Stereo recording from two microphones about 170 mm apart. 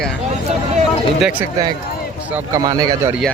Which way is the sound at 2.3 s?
20° right (ahead or behind).